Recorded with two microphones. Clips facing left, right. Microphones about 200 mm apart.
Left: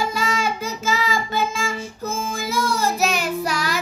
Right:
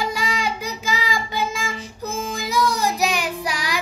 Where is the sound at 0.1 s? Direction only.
15° right (ahead or behind).